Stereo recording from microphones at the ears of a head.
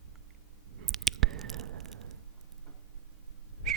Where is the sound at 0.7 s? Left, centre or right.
Right.